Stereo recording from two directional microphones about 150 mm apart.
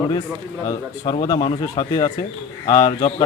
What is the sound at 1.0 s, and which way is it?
Speech, 40° left (ahead or behind).